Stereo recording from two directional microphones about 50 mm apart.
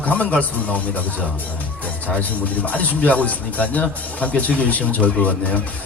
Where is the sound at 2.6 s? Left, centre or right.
Left.